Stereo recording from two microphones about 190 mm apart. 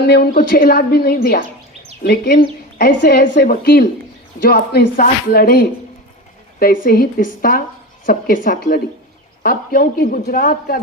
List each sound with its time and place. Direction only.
0.0 s speech: 55° left (ahead or behind)